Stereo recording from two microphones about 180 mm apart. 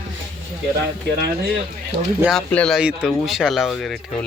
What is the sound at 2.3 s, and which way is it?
Speech, 5° left (ahead or behind).